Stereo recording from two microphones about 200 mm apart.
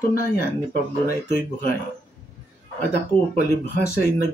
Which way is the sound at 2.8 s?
50° left (ahead or behind).